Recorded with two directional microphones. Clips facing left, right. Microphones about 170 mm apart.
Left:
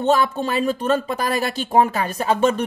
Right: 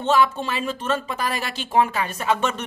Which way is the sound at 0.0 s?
40° left (ahead or behind).